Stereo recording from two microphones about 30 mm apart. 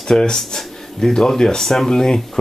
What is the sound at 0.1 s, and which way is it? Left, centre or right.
Speech, left.